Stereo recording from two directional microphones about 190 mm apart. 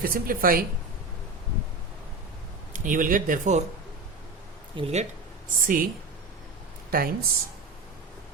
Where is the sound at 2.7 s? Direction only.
45° right (ahead or behind).